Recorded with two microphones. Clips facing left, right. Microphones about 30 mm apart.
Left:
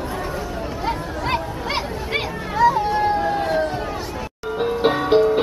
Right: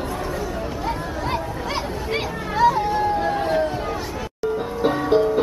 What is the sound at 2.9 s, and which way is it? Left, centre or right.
Hubbub, left.